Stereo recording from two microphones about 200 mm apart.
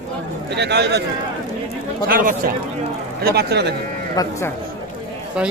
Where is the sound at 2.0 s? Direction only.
45° right (ahead or behind).